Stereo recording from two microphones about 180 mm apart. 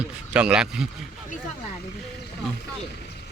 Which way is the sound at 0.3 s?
5° right (ahead or behind).